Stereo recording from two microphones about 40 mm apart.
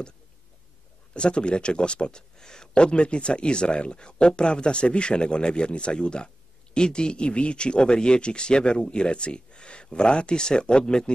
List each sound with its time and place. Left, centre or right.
1.1 s speech: left